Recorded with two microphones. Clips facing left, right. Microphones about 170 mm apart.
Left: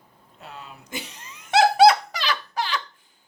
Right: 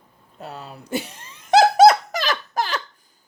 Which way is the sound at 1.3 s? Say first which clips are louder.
Right 4 dB; 35° right (ahead or behind).